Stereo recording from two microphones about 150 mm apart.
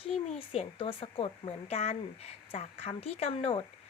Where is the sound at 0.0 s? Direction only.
40° left (ahead or behind).